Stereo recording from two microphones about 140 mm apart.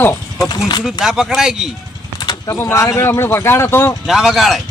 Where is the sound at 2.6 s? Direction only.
20° left (ahead or behind).